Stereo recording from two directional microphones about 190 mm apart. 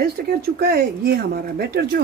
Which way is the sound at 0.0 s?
55° right (ahead or behind).